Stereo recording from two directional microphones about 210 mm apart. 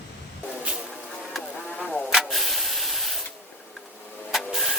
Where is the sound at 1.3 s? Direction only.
5° left (ahead or behind).